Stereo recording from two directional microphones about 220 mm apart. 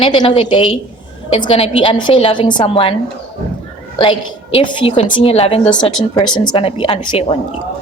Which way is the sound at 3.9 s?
25° left (ahead or behind).